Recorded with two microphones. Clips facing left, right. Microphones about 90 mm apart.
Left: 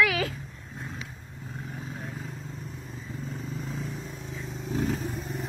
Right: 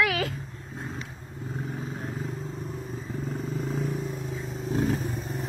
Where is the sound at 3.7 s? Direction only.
50° right (ahead or behind).